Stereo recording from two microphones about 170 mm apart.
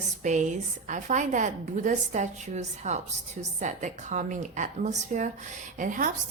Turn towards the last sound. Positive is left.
turn(degrees=-50)  # may be behind; listen again after turning